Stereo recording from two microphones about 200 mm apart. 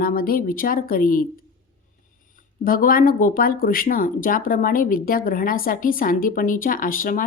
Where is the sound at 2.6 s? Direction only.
45° left (ahead or behind).